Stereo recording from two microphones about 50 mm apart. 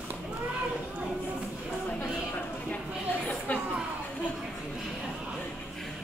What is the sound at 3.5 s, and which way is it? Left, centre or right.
Music, left.